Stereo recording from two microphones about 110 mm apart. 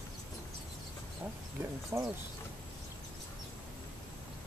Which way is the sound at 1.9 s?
20° right (ahead or behind).